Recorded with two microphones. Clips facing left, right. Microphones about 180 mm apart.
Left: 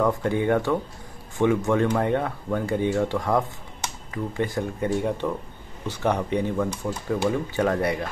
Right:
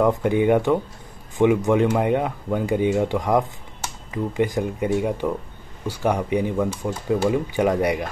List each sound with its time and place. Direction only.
0.0 s speech: 15° right (ahead or behind)